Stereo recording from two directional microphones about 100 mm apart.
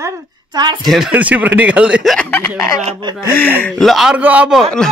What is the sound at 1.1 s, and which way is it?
Speech, 15° right (ahead or behind).